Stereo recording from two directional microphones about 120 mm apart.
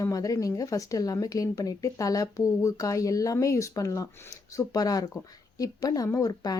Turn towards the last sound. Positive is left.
turn(degrees=30)  # may be behind; listen again after turning